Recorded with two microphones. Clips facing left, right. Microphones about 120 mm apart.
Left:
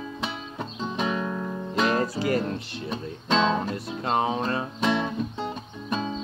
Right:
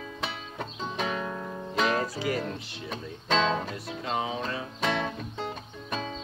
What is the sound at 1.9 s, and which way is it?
Music, 55° left (ahead or behind).